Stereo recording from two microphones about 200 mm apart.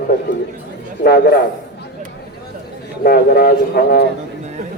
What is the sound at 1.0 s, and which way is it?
Speech, 50° left (ahead or behind).